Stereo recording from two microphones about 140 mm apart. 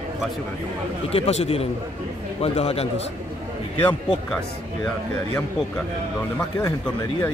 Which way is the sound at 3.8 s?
10° left (ahead or behind).